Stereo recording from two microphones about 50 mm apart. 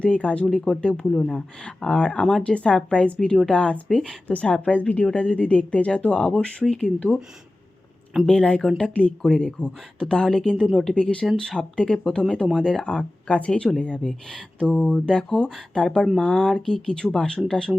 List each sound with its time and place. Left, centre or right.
0.0 s speech: left
0.4 s speech: centre
8.3 s speech: centre
10.7 s speech: centre
10.9 s speech: centre